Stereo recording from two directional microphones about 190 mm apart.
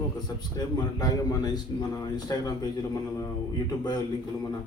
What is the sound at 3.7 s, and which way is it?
Speech, 20° left (ahead or behind).